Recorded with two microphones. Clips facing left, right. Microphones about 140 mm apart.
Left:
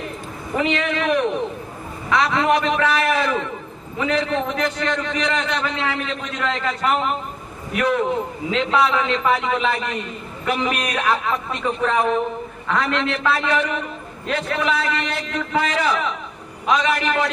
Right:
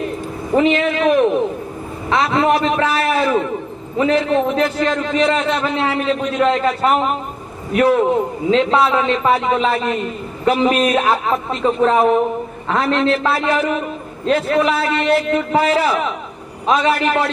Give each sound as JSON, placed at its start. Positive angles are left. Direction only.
{"t": 0.6, "sound": "a man's voice", "side_deg": -30}